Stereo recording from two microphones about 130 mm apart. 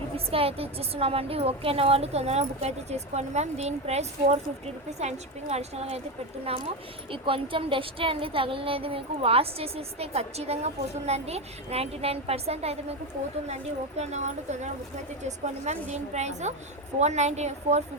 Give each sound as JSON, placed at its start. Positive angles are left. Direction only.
{"t": 0.3, "sound": "a woman's voice", "side_deg": -50}